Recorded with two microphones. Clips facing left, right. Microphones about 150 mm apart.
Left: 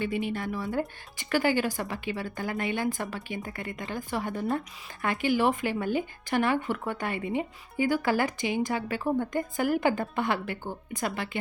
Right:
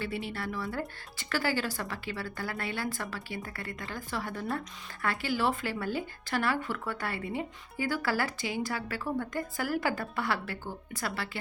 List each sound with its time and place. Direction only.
0.0 s speech: 15° left (ahead or behind)